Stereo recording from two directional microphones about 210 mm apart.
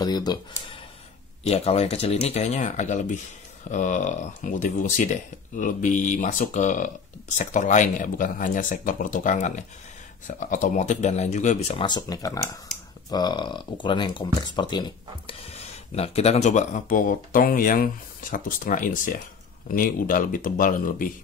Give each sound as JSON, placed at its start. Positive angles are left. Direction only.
{"t": 0.0, "sound": "speech", "side_deg": 20}
{"t": 1.4, "sound": "speech", "side_deg": 30}